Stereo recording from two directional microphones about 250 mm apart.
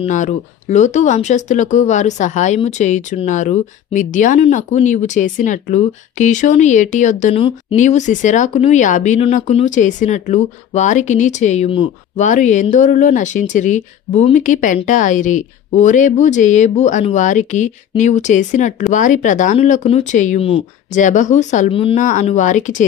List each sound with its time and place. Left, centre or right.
0.0 s speech: left